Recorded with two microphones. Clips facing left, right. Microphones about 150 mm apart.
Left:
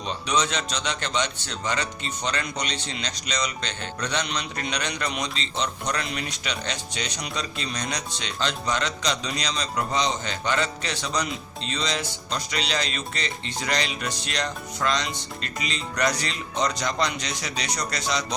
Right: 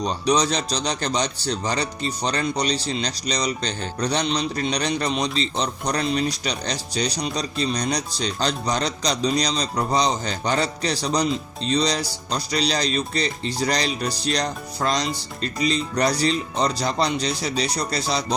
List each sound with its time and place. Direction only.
0.0 s a man's voice: 35° right (ahead or behind)